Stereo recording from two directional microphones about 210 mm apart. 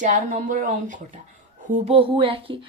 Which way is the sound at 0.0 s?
35° right (ahead or behind).